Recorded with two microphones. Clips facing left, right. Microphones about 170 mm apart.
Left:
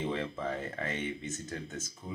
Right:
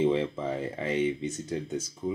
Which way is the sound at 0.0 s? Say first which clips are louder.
Right 8 dB; 25° right (ahead or behind).